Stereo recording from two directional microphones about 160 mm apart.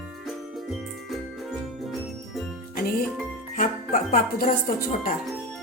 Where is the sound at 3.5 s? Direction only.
60° left (ahead or behind).